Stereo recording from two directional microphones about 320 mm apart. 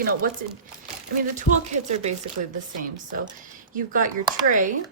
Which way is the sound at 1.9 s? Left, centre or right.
Right.